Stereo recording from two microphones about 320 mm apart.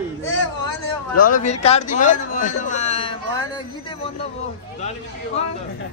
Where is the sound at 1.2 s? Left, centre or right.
Left.